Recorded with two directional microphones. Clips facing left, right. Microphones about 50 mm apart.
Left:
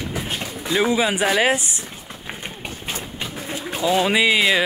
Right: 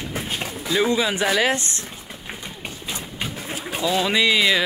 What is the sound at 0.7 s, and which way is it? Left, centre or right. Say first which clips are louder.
Speech: left 1 dB; centre.